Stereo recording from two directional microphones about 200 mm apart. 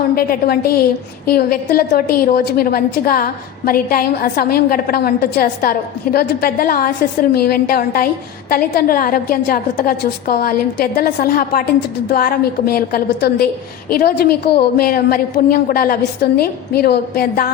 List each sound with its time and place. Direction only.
0.2 s a woman's voice: 50° left (ahead or behind)